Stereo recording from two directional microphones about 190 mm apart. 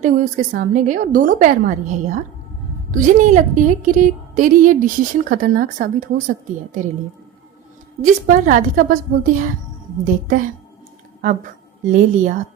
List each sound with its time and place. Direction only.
0.0 s a woman's voice: 45° right (ahead or behind)
8.0 s a woman's voice: 40° right (ahead or behind)